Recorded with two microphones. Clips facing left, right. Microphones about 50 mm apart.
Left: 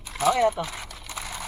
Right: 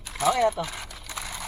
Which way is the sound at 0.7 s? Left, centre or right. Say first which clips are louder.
Even; left.